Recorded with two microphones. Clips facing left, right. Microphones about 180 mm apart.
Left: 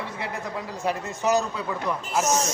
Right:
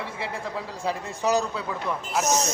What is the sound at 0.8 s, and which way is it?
Speech, 30° right (ahead or behind).